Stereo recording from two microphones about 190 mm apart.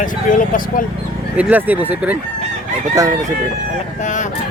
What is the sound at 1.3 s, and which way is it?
Speech, 10° right (ahead or behind).